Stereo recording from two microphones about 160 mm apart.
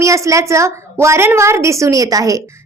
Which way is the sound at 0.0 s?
20° right (ahead or behind).